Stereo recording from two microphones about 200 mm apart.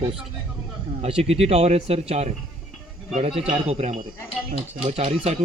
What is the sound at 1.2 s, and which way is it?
Speech, 30° right (ahead or behind).